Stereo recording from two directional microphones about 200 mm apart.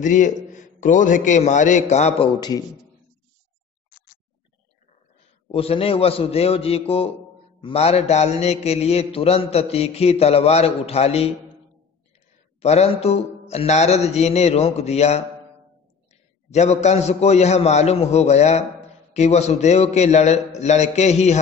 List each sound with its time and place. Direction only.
0.0 s mantra: 40° left (ahead or behind)
5.5 s a man's voice: 30° left (ahead or behind)
7.6 s mantra: 30° left (ahead or behind)
12.6 s mantra: 30° left (ahead or behind)
16.4 s mantra: 35° left (ahead or behind)